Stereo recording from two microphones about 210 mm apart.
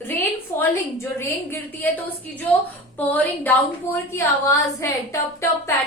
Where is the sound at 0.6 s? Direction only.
10° left (ahead or behind).